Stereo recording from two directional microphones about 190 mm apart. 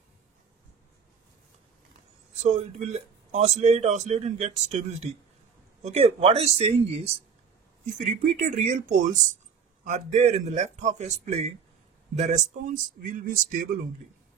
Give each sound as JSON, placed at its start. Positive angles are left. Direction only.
{"t": 2.4, "sound": "speech", "side_deg": -35}